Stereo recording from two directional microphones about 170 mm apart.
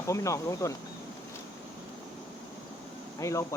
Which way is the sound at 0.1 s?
20° left (ahead or behind).